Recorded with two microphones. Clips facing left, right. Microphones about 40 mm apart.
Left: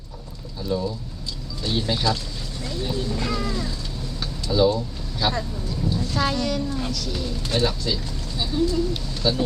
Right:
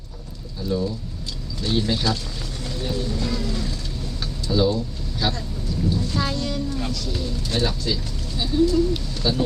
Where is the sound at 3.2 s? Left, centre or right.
Left.